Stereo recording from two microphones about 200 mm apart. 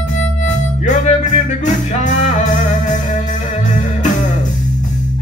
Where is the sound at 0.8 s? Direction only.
35° left (ahead or behind).